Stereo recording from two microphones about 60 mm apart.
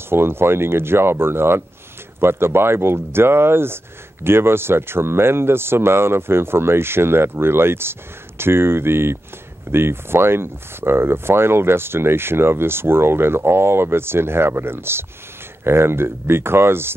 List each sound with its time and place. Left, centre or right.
0.1 s speech: right